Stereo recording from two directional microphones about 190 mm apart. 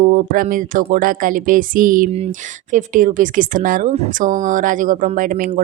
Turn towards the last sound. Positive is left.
turn(degrees=-45)  # may be behind; listen again after turning